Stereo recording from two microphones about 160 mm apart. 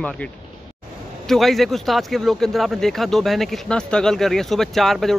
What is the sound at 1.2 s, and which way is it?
Speech, centre (ahead or behind).